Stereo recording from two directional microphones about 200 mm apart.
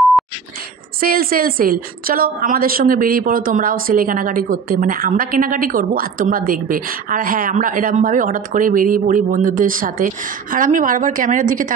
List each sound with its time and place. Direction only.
1.0 s a woman's voice: 45° right (ahead or behind)